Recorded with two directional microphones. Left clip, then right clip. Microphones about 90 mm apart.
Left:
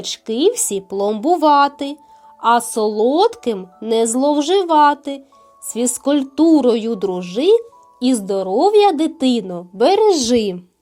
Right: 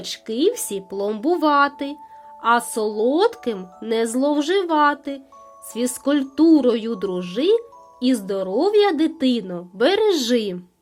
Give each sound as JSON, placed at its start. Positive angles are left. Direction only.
{"t": 0.5, "sound": "speech", "side_deg": 35}
{"t": 6.1, "sound": "speech", "side_deg": 20}